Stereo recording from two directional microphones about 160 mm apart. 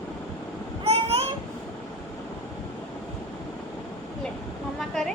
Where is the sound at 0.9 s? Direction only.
40° right (ahead or behind).